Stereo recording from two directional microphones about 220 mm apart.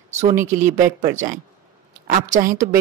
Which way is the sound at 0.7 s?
15° right (ahead or behind).